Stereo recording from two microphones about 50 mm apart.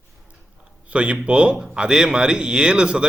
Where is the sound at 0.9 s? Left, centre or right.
Right.